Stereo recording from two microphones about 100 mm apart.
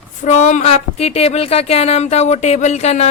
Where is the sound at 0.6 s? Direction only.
90° left.